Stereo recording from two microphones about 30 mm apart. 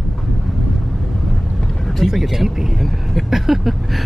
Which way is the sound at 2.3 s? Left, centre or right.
Centre.